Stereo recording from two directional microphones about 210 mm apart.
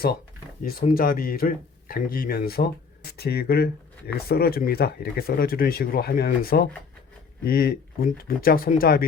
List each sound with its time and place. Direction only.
0.6 s speech: 45° left (ahead or behind)